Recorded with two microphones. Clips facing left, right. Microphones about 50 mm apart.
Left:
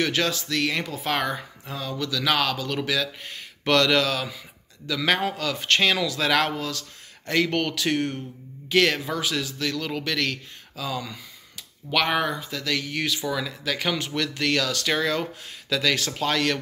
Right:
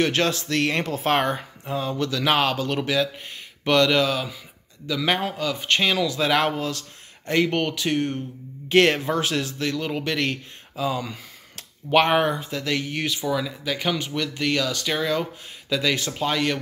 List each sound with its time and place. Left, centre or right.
0.0 s speech: right
0.8 s speech: right
1.1 s speech: right; by 6.0 s centre
6.0 s speech: centre
7.2 s speech: right
8.6 s speech: right
9.6 s speech: right
13.2 s speech: centre